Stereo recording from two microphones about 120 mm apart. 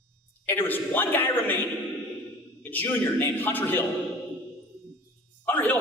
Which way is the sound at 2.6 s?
15° left (ahead or behind).